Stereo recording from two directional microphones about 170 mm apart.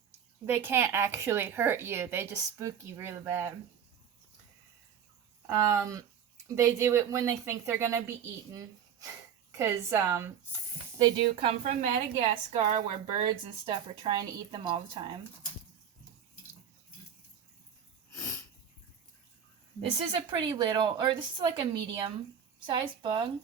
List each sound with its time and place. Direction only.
0.4 s a woman's voice: 15° right (ahead or behind)
5.5 s a woman's voice: 20° right (ahead or behind)
9.5 s a woman's voice: 15° right (ahead or behind)
10.9 s a woman's voice: 30° right (ahead or behind)
11.8 s a woman's voice: 45° right (ahead or behind); by 15.2 s 25° right (ahead or behind)
18.1 s sneeze: 15° left (ahead or behind)
20.5 s speech: 30° right (ahead or behind)